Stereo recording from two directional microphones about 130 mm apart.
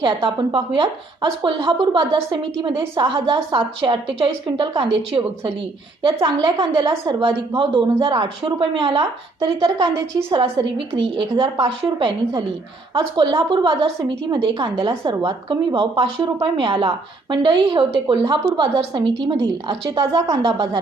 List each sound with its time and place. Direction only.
0.0 s a woman's voice: 35° right (ahead or behind)
6.2 s a woman's voice: 35° right (ahead or behind)